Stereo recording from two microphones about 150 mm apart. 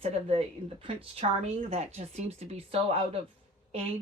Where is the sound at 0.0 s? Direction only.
40° right (ahead or behind).